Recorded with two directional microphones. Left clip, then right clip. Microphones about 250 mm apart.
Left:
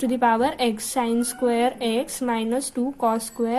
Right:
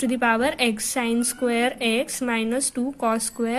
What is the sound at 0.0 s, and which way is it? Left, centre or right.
Speech, right.